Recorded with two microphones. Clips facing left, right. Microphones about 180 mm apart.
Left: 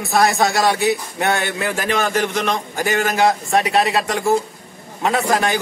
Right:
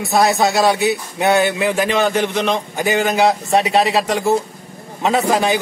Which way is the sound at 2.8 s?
25° right (ahead or behind).